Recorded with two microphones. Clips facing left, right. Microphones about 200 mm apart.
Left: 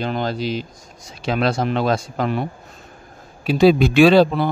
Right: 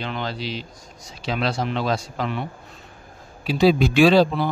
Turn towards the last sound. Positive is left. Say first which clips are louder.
# left 3 dB
turn(degrees=55)  # may be behind; listen again after turning